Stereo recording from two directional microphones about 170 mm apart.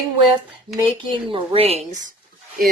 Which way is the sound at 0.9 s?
30° right (ahead or behind).